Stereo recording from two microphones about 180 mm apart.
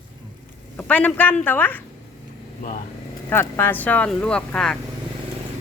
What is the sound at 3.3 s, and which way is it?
Speech, 10° left (ahead or behind).